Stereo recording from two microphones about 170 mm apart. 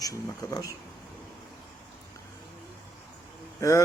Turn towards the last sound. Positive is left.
turn(degrees=20)  # may be behind; listen again after turning